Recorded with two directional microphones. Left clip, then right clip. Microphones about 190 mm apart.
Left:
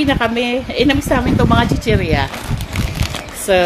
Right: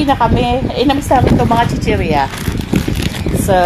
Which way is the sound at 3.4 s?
Centre (ahead or behind).